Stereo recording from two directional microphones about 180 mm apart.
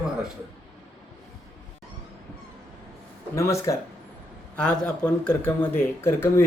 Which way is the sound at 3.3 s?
15° left (ahead or behind).